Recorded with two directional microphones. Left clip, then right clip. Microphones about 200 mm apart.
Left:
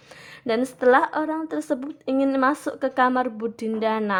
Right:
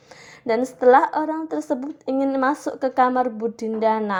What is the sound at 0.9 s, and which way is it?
A woman's voice, 30° left (ahead or behind).